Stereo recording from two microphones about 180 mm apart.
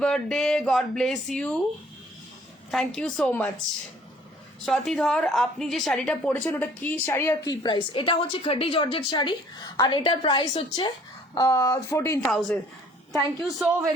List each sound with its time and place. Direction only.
0.0 s speech: 5° left (ahead or behind)
2.7 s speech: 5° left (ahead or behind)
4.6 s a woman's voice: centre (ahead or behind)
12.2 s speech: 5° left (ahead or behind)